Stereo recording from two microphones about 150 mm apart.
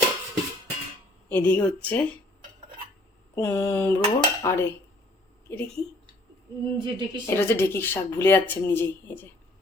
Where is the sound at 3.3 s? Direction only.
15° left (ahead or behind).